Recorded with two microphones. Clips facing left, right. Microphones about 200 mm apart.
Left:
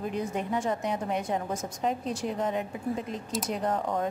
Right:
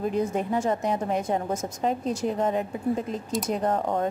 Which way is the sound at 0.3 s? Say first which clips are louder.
Right 4 dB; 45° right (ahead or behind).